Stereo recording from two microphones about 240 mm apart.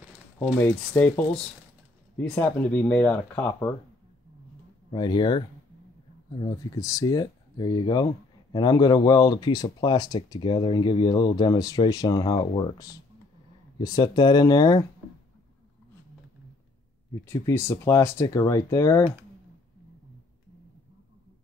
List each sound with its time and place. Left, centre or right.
0.4 s speech: centre
4.9 s speech: centre
17.1 s speech: centre